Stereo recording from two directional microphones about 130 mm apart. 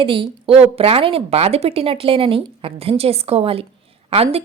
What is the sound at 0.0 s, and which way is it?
Speech, 45° right (ahead or behind).